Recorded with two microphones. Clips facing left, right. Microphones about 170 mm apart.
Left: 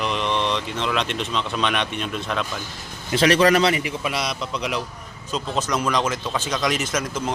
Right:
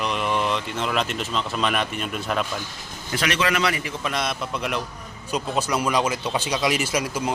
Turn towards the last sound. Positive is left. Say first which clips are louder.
# right 1 dB
turn(degrees=-10)  # may be behind; listen again after turning